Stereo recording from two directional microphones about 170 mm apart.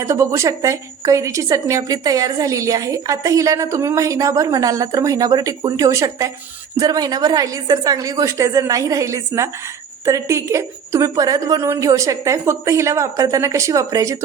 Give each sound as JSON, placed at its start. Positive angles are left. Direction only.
{"t": 0.0, "sound": "a woman's voice", "side_deg": -15}